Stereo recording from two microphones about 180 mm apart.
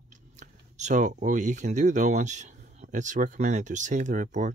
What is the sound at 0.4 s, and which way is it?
Speech, 40° right (ahead or behind).